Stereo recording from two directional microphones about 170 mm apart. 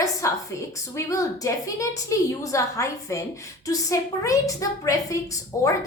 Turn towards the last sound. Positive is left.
turn(degrees=20)  # may be behind; listen again after turning